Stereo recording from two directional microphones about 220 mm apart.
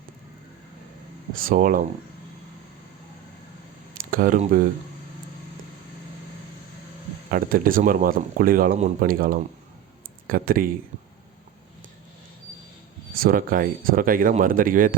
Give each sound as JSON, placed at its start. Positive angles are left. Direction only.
{"t": 1.3, "sound": "speech", "side_deg": -40}
{"t": 3.9, "sound": "speech", "side_deg": -40}
{"t": 7.3, "sound": "speech", "side_deg": -40}
{"t": 13.1, "sound": "speech", "side_deg": -40}